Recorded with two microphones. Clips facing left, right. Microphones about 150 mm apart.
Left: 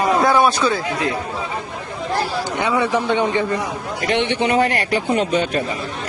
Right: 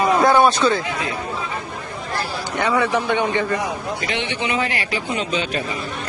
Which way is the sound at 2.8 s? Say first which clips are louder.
Left 2 dB; 20° left (ahead or behind).